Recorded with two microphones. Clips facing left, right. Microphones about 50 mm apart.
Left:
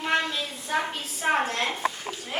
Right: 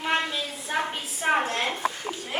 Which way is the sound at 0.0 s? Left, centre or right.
Centre.